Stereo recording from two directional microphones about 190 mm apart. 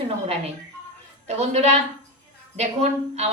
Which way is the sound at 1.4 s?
35° right (ahead or behind).